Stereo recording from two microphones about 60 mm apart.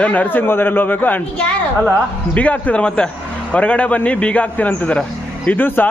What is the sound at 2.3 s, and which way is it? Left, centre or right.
A man's voice, left.